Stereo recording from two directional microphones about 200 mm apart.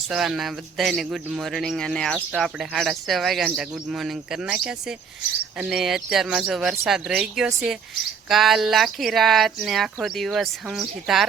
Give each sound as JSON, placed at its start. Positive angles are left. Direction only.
{"t": 0.1, "sound": "speech", "side_deg": 0}